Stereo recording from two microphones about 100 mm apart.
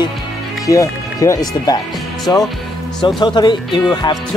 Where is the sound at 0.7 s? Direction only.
30° left (ahead or behind).